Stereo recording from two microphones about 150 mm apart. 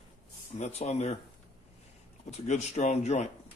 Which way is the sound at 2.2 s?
50° left (ahead or behind).